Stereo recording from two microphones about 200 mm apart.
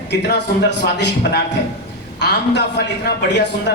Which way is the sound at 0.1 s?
60° left (ahead or behind).